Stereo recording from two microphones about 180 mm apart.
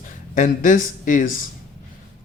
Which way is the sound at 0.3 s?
45° left (ahead or behind).